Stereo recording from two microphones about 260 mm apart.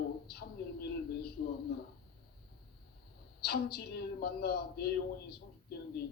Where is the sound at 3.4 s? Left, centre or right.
Left.